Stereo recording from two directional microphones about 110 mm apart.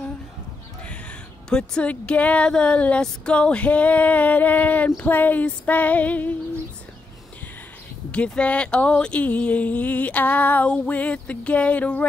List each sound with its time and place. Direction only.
0.8 s speech: 10° left (ahead or behind)
8.1 s speech: 10° left (ahead or behind)